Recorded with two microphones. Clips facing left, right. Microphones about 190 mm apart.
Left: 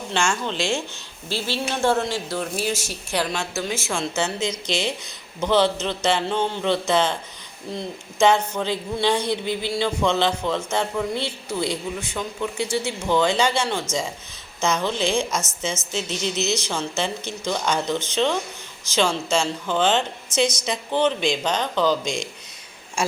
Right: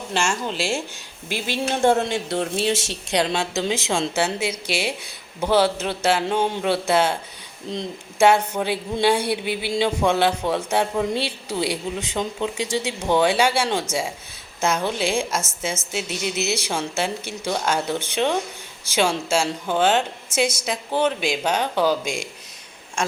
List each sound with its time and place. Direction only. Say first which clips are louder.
0.1 s a woman's voice: even; 5° right (ahead or behind)
23.0 s speech: left 1 dB; 5° left (ahead or behind)